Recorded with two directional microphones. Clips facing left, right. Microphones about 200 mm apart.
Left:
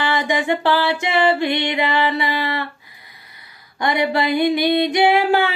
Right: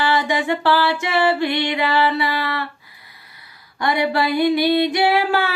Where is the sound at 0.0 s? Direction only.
20° left (ahead or behind).